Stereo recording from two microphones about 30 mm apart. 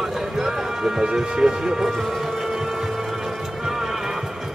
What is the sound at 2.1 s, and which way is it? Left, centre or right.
Music, centre.